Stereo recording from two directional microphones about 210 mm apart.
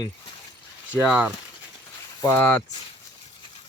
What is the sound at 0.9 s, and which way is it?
Speech, 5° right (ahead or behind).